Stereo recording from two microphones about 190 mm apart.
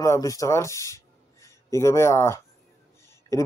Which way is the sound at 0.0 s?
15° left (ahead or behind).